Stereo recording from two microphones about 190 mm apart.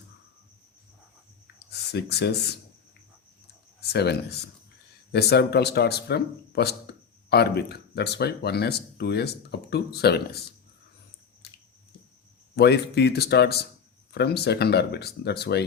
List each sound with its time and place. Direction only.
1.7 s speech: 60° left (ahead or behind)
3.8 s speech: 60° left (ahead or behind)
11.4 s a sound: 60° left (ahead or behind)
12.5 s speech: 60° left (ahead or behind)